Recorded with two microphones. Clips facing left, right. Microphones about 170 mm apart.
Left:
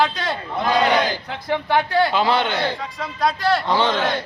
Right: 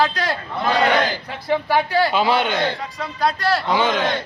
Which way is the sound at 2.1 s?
15° right (ahead or behind).